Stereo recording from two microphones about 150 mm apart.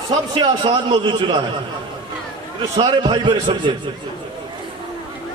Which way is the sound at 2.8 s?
30° right (ahead or behind).